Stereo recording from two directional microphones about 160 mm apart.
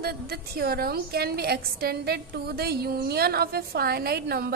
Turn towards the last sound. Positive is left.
turn(degrees=-75)  # may be behind; listen again after turning